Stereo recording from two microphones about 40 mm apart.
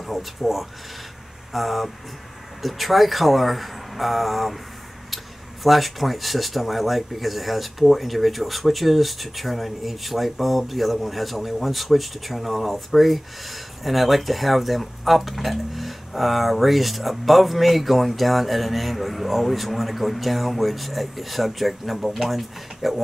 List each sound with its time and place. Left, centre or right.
0.0 s speech: centre